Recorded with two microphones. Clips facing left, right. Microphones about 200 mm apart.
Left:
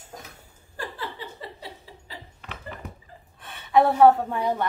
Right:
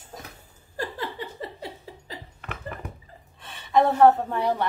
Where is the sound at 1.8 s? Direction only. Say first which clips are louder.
Right 3 dB; 50° right (ahead or behind).